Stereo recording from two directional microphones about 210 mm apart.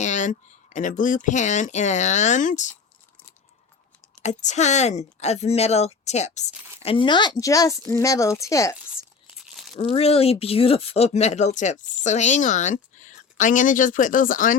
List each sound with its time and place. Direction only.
0.0 s speech: 35° left (ahead or behind)
4.2 s speech: 35° left (ahead or behind); by 8.7 s 15° left (ahead or behind)
9.7 s speech: 30° left (ahead or behind)